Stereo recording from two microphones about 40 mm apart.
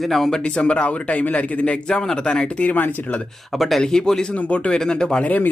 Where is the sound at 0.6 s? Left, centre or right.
Left.